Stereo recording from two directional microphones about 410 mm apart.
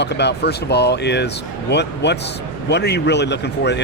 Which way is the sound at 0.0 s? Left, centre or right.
Left.